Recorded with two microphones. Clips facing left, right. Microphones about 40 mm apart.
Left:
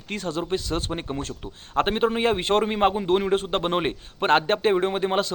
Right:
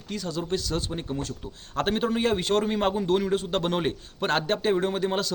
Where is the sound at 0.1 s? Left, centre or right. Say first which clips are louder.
Left 3 dB; left.